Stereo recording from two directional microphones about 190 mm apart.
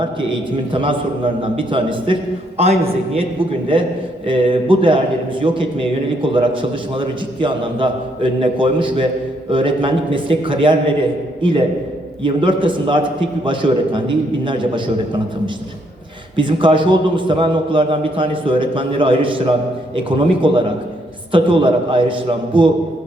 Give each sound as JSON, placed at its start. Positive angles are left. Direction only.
{"t": 0.0, "sound": "a man's voice", "side_deg": -25}
{"t": 16.3, "sound": "a man's voice", "side_deg": -25}